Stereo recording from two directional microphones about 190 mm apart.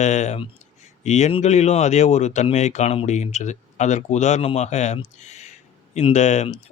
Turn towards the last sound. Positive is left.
turn(degrees=40)  # may be behind; listen again after turning